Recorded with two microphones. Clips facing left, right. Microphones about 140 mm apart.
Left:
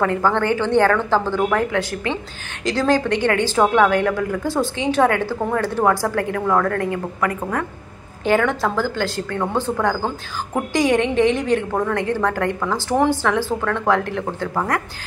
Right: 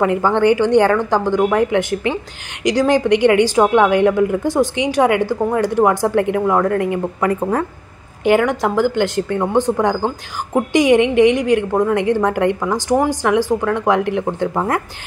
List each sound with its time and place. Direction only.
0.0 s a woman's voice: 15° right (ahead or behind)
8.2 s a woman's voice: 15° right (ahead or behind)